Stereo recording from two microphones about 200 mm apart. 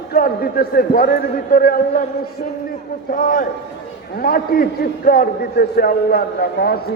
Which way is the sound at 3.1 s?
45° left (ahead or behind).